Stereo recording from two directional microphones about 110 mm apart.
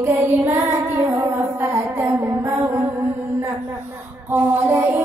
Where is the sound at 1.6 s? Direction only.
20° right (ahead or behind).